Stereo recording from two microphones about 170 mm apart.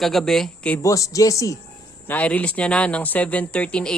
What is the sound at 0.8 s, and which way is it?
Speech, 20° left (ahead or behind).